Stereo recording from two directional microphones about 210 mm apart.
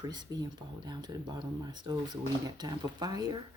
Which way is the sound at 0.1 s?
20° right (ahead or behind).